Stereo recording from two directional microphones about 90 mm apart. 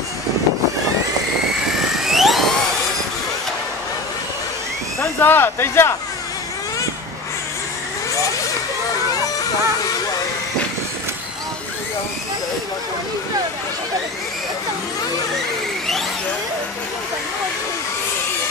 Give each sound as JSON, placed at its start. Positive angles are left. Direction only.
{"t": 2.0, "sound": "helicopter", "side_deg": -5}
{"t": 5.0, "sound": "speech", "side_deg": 25}